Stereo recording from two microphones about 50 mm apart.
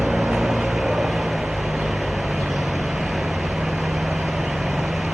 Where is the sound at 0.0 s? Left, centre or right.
Centre.